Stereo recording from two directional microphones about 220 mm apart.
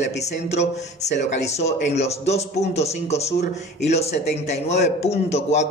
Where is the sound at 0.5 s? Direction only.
30° left (ahead or behind).